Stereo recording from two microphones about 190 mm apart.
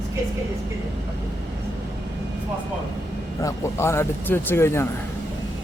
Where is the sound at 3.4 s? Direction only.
15° left (ahead or behind).